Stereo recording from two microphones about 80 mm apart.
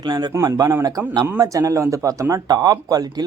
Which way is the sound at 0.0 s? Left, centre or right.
Right.